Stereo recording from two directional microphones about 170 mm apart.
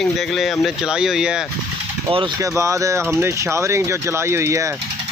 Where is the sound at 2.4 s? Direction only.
15° right (ahead or behind).